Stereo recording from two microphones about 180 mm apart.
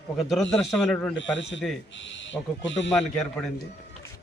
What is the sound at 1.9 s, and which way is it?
Speech, 90° left.